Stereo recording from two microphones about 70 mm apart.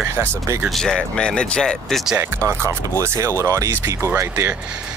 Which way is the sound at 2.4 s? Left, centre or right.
Right.